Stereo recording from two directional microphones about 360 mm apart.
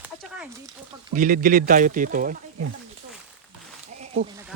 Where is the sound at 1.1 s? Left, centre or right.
Right.